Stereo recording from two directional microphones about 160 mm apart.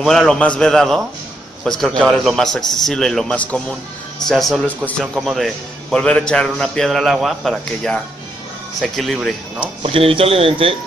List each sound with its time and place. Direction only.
0.0 s a man's voice: centre (ahead or behind)
9.8 s speech: 35° right (ahead or behind)